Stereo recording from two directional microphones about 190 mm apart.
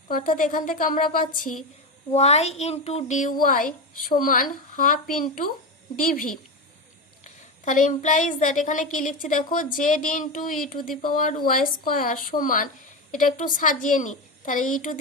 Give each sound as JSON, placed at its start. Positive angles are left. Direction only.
{"t": 0.1, "sound": "a woman's voice", "side_deg": 45}
{"t": 2.0, "sound": "a child's voice", "side_deg": 35}